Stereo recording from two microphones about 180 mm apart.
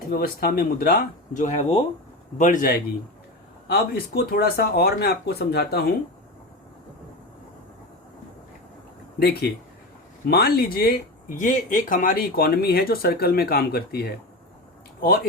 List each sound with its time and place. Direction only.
0.1 s speech: 55° left (ahead or behind)
9.1 s speech: 60° left (ahead or behind)